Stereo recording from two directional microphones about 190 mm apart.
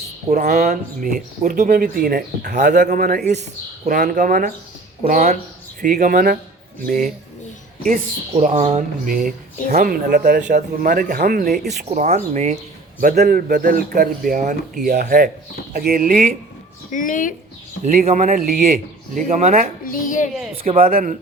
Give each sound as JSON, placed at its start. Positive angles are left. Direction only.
{"t": 0.3, "sound": "speech", "side_deg": -45}
{"t": 8.4, "sound": "speech", "side_deg": -40}
{"t": 11.9, "sound": "speech", "side_deg": -35}
{"t": 13.0, "sound": "speech", "side_deg": -50}
{"t": 16.9, "sound": "a woman's voice", "side_deg": 45}
{"t": 17.9, "sound": "speech", "side_deg": -40}
{"t": 19.1, "sound": "speech", "side_deg": -35}
{"t": 19.8, "sound": "a woman's voice", "side_deg": 45}
{"t": 20.7, "sound": "speech", "side_deg": -50}